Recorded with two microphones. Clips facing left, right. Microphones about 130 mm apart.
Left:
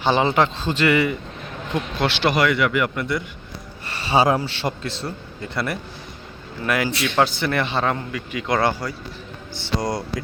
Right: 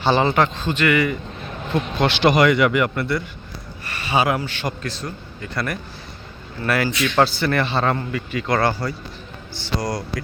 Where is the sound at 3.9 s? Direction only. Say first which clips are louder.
Left 2 dB; 30° left (ahead or behind).